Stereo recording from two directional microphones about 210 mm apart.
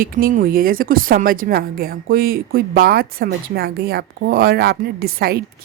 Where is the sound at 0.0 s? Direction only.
40° right (ahead or behind).